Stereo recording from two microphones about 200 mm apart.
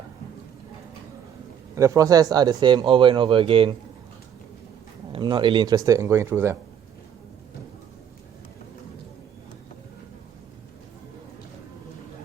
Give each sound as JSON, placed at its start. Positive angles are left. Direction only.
{"t": 1.7, "sound": "speech", "side_deg": -15}
{"t": 5.1, "sound": "speech", "side_deg": -25}